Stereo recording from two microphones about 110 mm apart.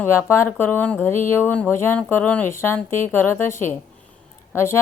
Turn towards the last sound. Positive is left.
turn(degrees=25)  # may be behind; listen again after turning